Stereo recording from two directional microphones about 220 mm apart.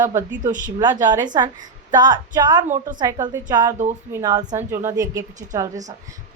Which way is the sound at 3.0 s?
20° right (ahead or behind).